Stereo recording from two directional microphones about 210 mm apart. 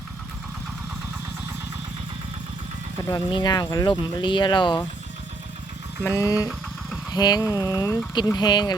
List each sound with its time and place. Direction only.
3.0 s speech: 20° left (ahead or behind)
6.0 s speech: 15° left (ahead or behind)